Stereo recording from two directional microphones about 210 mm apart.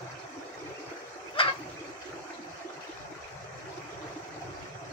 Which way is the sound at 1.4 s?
25° left (ahead or behind).